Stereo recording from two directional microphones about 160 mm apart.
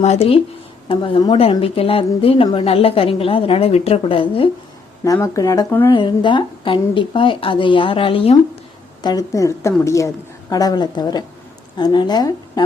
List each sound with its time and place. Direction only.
0.0 s a woman's voice: 40° left (ahead or behind)
5.0 s speech: 20° left (ahead or behind)
5.9 s a woman's voice: 30° left (ahead or behind)
9.0 s speech: 20° left (ahead or behind)